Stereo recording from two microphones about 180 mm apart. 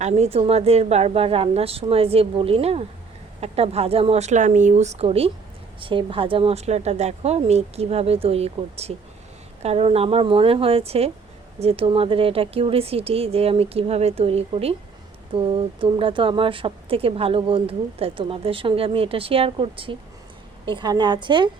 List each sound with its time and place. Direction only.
0.0 s a woman's voice: 40° right (ahead or behind)